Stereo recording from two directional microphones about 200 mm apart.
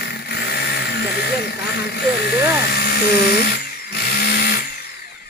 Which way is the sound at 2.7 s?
55° left (ahead or behind).